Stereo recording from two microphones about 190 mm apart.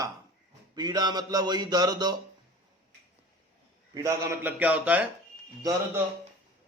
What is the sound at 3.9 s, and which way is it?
A man's voice, 15° right (ahead or behind).